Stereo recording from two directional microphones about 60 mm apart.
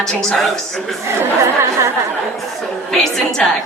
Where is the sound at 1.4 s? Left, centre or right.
Right.